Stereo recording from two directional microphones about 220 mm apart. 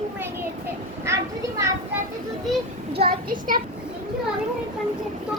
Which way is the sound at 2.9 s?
45° right (ahead or behind).